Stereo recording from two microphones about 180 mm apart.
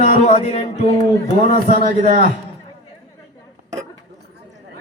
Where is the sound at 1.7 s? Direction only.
40° left (ahead or behind).